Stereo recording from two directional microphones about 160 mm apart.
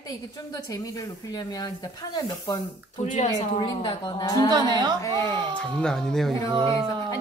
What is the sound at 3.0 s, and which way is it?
Speech, 45° left (ahead or behind).